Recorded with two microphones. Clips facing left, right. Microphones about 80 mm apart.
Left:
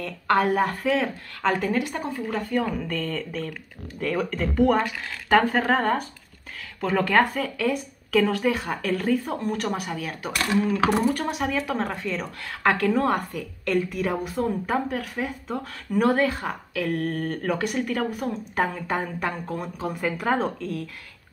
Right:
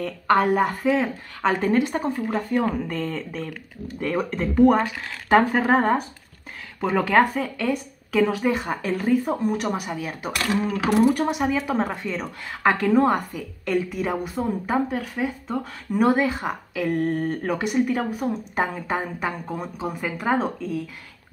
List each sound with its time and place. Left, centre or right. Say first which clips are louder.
0.3 s a woman's voice: right 2 dB; centre
1.6 s speech: right 4 dB; right
2.1 s speech: right 2 dB; centre
2.6 s speech: right 3 dB; right
2.9 s speech: right 1 dB; centre
4.6 s speech: right 4 dB; centre
10.5 s speech: left 2 dB; right
11.1 s a woman's voice: right 4 dB; centre